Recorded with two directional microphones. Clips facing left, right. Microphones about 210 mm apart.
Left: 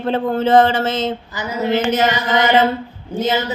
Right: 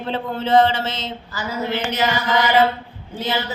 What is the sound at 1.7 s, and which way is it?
Speech, 45° left (ahead or behind).